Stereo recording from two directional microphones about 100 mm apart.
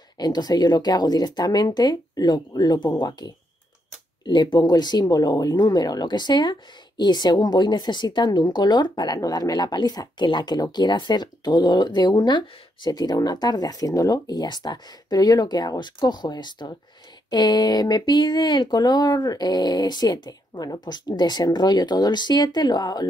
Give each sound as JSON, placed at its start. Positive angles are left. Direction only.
{"t": 0.2, "sound": "speech", "side_deg": 45}
{"t": 4.3, "sound": "speech", "side_deg": 45}